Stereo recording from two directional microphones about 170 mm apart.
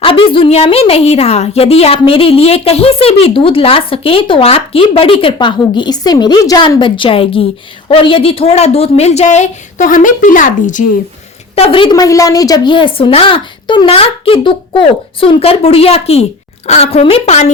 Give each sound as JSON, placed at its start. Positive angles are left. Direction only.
{"t": 0.0, "sound": "a woman's voice", "side_deg": 30}
{"t": 11.5, "sound": "a woman's voice", "side_deg": 35}